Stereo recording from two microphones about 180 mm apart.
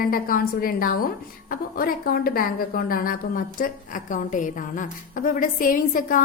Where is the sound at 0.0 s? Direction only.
55° left (ahead or behind).